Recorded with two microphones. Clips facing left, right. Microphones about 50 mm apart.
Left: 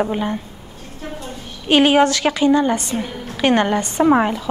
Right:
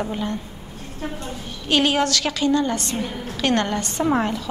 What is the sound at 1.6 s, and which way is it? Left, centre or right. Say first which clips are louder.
A woman's voice: left 6 dB; left.